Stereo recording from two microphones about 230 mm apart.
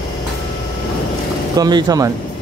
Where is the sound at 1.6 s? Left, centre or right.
Centre.